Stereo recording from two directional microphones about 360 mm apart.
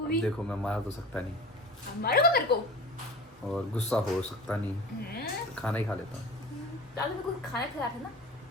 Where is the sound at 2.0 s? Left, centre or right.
Left.